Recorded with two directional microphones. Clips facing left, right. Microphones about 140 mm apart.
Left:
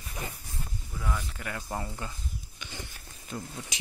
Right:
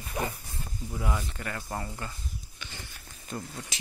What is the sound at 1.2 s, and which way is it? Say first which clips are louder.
Speech: right 1 dB; 5° left (ahead or behind).